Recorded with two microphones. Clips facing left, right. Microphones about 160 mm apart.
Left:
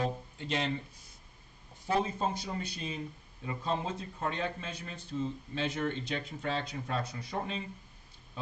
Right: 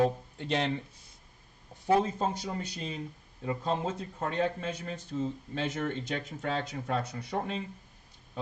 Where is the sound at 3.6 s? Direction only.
50° right (ahead or behind).